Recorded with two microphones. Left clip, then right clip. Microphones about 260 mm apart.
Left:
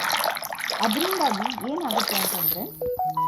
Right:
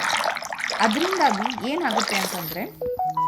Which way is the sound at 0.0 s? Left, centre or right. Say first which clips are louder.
Right 1 dB; centre.